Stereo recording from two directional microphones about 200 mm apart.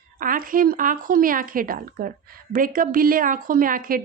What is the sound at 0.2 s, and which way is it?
Speech, 45° right (ahead or behind).